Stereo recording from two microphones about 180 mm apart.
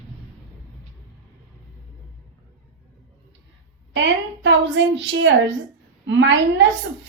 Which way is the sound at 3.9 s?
90° right.